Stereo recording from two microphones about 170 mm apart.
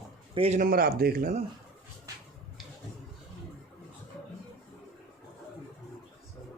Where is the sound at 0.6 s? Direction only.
60° right (ahead or behind).